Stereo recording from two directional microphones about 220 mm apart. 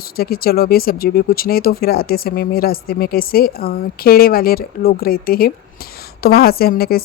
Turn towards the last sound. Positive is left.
turn(degrees=45)  # may be behind; listen again after turning